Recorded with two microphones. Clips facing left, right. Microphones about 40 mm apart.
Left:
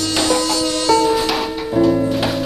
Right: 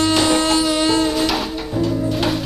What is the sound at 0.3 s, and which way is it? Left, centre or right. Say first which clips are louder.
Music: right 1 dB; right.